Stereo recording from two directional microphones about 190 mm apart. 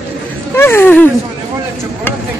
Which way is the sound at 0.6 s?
10° left (ahead or behind).